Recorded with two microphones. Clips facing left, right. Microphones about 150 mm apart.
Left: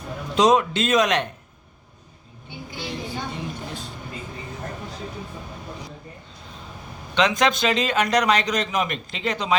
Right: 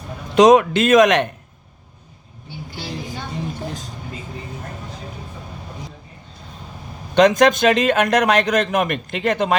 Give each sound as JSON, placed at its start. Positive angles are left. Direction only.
{"t": 0.3, "sound": "speech", "side_deg": -60}
{"t": 7.2, "sound": "a man's voice", "side_deg": -45}